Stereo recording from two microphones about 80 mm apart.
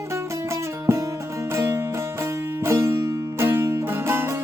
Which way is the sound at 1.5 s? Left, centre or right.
Right.